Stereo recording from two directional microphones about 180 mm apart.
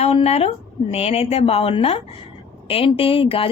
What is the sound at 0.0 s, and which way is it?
A woman's voice, 35° left (ahead or behind).